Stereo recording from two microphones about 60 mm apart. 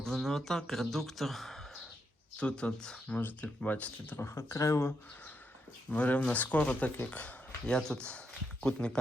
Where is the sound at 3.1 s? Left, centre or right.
Left.